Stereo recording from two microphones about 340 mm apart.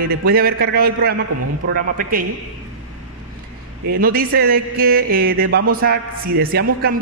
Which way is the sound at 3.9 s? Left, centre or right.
Right.